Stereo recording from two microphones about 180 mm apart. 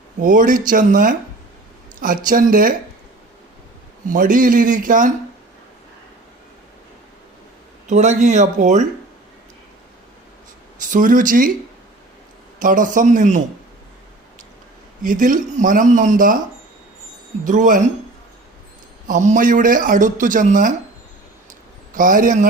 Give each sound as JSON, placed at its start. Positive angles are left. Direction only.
{"t": 0.2, "sound": "speech", "side_deg": -45}
{"t": 4.1, "sound": "speech", "side_deg": -50}
{"t": 7.9, "sound": "speech", "side_deg": -40}
{"t": 10.8, "sound": "speech", "side_deg": -45}
{"t": 12.5, "sound": "speech", "side_deg": -45}
{"t": 15.0, "sound": "speech", "side_deg": -50}
{"t": 17.4, "sound": "speech", "side_deg": -45}
{"t": 19.0, "sound": "speech", "side_deg": -45}
{"t": 21.9, "sound": "speech", "side_deg": -50}